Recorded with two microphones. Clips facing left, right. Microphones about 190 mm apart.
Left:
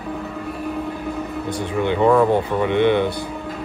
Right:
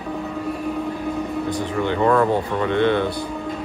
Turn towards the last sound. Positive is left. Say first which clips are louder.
# left 2 dB
turn(degrees=15)  # may be behind; listen again after turning